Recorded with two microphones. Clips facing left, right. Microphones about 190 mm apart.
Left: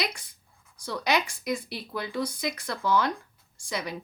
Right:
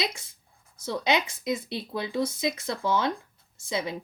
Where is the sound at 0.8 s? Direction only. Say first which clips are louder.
Right 1 dB; 25° right (ahead or behind).